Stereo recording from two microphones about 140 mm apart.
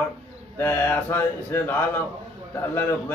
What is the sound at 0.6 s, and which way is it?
A man's voice, 15° left (ahead or behind).